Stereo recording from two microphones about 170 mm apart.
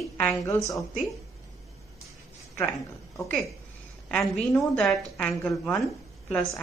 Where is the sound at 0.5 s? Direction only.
15° left (ahead or behind).